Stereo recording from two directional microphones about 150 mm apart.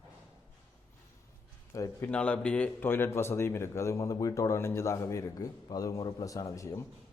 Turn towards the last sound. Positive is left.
turn(degrees=20)  # may be behind; listen again after turning